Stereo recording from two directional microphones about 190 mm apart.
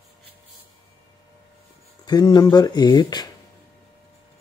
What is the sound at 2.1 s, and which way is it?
Speech, 20° left (ahead or behind).